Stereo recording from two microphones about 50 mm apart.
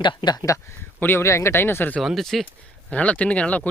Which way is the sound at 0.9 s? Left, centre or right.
Left.